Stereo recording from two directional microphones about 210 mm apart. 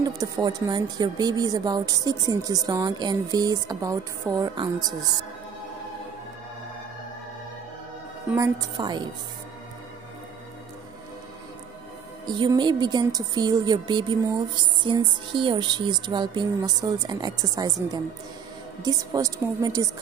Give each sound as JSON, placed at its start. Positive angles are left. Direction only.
{"t": 0.0, "sound": "speech", "side_deg": -15}
{"t": 8.3, "sound": "speech", "side_deg": -15}
{"t": 12.3, "sound": "speech", "side_deg": -20}